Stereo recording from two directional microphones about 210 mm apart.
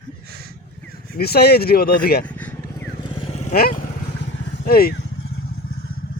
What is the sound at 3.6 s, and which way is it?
Speech, 45° left (ahead or behind).